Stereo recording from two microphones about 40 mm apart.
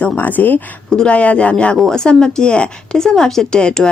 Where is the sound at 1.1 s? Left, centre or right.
Left.